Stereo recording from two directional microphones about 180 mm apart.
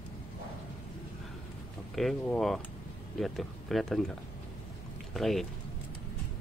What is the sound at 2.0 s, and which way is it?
Speech, 5° left (ahead or behind).